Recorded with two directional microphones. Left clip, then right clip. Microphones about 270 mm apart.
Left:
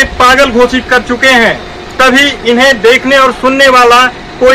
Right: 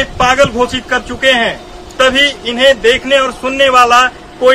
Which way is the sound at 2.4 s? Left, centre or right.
Right.